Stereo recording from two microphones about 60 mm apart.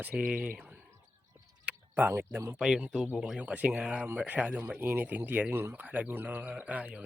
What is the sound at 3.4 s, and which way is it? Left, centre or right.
Speech, right.